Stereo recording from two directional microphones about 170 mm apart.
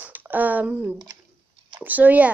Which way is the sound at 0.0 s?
10° right (ahead or behind).